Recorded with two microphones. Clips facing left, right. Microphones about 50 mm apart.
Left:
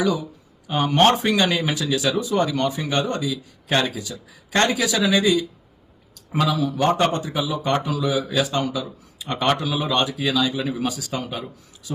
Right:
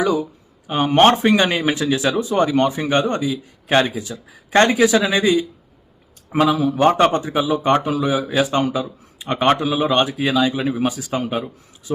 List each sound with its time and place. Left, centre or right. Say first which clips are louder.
0.0 s speech: right 3 dB; right